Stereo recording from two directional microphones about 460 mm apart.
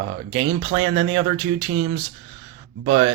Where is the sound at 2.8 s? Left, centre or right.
Centre.